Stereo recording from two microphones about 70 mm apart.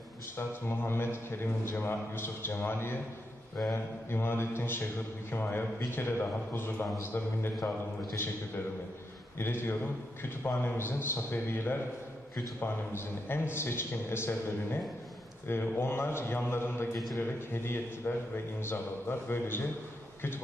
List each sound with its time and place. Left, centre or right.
0.4 s a man's voice: left
9.4 s a man's voice: left